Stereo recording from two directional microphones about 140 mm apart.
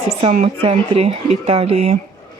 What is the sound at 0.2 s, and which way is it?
Speech, 50° right (ahead or behind).